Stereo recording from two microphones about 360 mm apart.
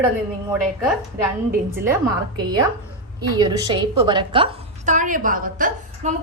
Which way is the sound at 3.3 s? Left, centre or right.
Centre.